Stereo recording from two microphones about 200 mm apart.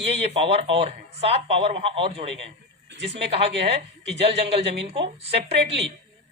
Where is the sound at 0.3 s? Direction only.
30° right (ahead or behind).